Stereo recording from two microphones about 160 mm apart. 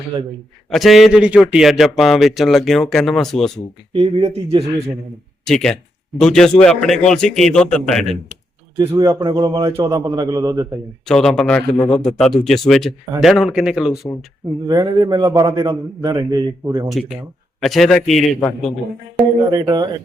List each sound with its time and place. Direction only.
0.7 s a man's voice: centre (ahead or behind)
3.9 s speech: 35° right (ahead or behind)
5.5 s a man's voice: 5° left (ahead or behind)
8.8 s a man's voice: 15° right (ahead or behind)
11.1 s a man's voice: 5° left (ahead or behind)
14.7 s a man's voice: 20° right (ahead or behind)
16.9 s a man's voice: centre (ahead or behind)
19.5 s a man's voice: 25° right (ahead or behind)